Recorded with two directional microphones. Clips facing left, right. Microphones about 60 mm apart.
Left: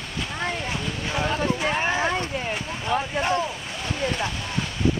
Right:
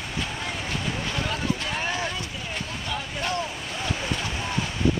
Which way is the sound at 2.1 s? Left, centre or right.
Left.